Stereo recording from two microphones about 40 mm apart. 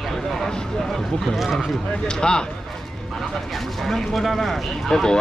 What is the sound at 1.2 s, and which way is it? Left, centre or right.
Speech, centre.